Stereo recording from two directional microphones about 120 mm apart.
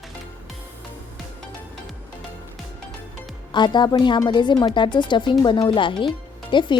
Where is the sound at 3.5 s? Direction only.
40° left (ahead or behind).